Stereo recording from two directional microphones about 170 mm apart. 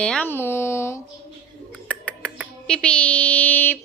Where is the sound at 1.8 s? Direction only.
5° left (ahead or behind).